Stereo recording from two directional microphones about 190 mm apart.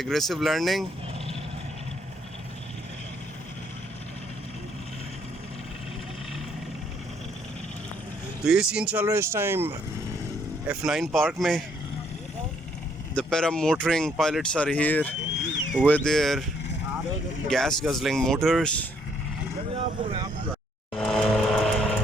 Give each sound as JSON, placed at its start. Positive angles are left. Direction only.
{"t": 0.0, "sound": "speech", "side_deg": 0}
{"t": 8.4, "sound": "speech", "side_deg": -5}
{"t": 10.7, "sound": "speech", "side_deg": 0}
{"t": 13.1, "sound": "speech", "side_deg": 5}
{"t": 17.5, "sound": "speech", "side_deg": 0}
{"t": 19.5, "sound": "speech", "side_deg": -30}
{"t": 20.9, "sound": "vehicle", "side_deg": 0}